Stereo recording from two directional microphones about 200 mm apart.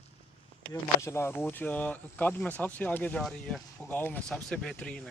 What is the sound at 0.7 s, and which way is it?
Speech, 15° left (ahead or behind).